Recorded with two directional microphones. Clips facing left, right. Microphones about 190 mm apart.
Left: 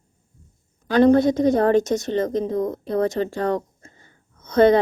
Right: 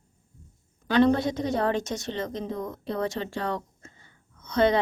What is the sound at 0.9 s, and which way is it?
A woman's voice, 45° left (ahead or behind).